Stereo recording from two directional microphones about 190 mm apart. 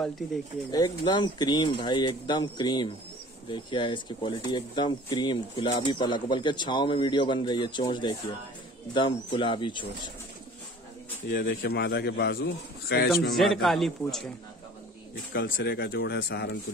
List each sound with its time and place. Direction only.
0.7 s speech: 20° left (ahead or behind)
11.2 s a man's voice: 65° left (ahead or behind)
13.4 s a man's voice: centre (ahead or behind)
15.3 s a man's voice: 55° left (ahead or behind)